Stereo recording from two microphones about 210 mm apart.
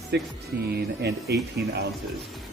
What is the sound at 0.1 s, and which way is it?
A man's voice, 55° right (ahead or behind).